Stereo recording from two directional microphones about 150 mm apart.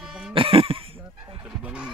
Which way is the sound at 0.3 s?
35° right (ahead or behind).